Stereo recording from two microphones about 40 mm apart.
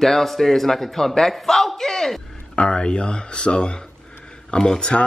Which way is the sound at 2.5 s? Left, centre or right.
Left.